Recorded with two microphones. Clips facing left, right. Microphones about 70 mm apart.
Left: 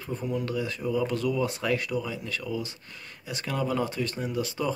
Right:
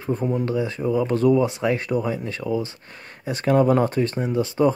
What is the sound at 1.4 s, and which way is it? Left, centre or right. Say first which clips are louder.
A man's voice: right 5 dB; right.